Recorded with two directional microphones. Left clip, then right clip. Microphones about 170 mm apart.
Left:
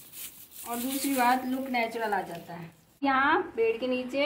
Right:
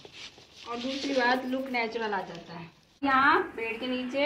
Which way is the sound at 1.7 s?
65° left (ahead or behind).